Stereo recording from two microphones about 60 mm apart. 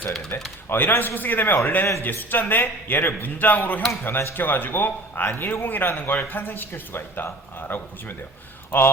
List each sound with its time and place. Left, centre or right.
0.3 s a man's voice: left
4.0 s a man's voice: left